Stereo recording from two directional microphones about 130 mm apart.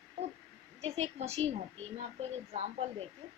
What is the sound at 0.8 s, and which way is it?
Speech, 55° right (ahead or behind).